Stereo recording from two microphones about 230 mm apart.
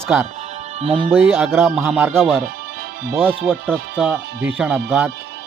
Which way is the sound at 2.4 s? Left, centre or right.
Right.